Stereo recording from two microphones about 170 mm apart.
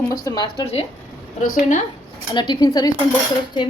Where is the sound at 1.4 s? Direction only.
50° left (ahead or behind).